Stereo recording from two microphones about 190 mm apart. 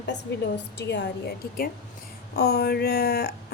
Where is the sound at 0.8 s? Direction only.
60° left (ahead or behind).